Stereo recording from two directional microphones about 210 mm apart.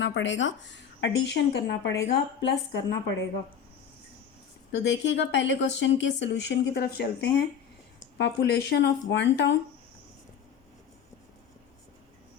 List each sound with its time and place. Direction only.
0.0 s a woman's voice: 60° left (ahead or behind)
4.7 s a woman's voice: 55° left (ahead or behind)